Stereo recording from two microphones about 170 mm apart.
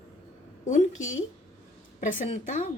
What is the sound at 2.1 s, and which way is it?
Speech, 50° left (ahead or behind).